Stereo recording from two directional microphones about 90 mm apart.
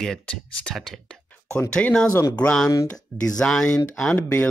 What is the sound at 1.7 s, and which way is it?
Speech, 10° left (ahead or behind).